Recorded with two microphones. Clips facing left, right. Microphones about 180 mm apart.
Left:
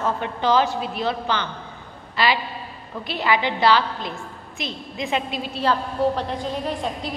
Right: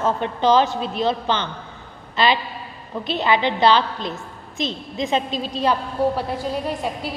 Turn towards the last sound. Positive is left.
turn(degrees=-5)  # may be behind; listen again after turning